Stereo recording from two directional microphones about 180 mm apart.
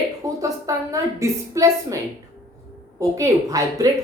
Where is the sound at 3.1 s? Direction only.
20° right (ahead or behind).